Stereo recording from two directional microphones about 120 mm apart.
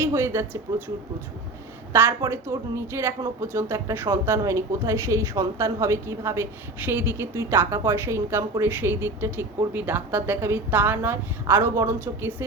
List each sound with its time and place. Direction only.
0.0 s speech: 20° right (ahead or behind)
1.9 s a woman's voice: 20° right (ahead or behind)